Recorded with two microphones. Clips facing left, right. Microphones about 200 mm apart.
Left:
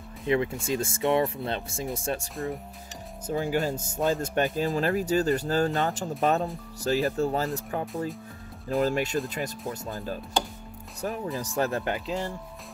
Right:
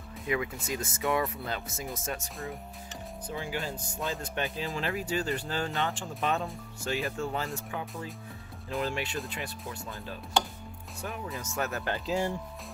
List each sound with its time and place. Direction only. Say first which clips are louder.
0.3 s speech: left 6 dB; 30° left (ahead or behind)
3.3 s speech: left 9 dB; 45° left (ahead or behind)
11.3 s speech: left 5 dB; 35° left (ahead or behind)
12.1 s speech: right 1 dB; 10° right (ahead or behind)